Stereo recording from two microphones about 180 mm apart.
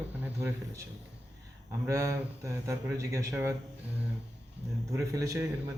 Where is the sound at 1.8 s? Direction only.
15° right (ahead or behind).